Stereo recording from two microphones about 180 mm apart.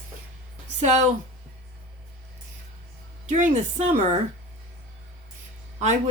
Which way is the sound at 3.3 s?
40° right (ahead or behind).